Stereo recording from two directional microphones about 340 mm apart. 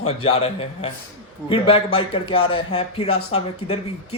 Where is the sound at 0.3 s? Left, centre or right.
Centre.